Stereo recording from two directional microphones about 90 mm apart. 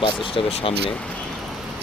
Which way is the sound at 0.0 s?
80° left.